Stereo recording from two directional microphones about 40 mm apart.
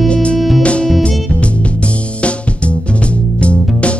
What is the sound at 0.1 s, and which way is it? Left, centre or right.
Music, left.